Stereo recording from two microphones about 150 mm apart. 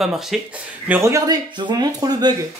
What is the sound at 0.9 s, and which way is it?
Speech, 20° right (ahead or behind).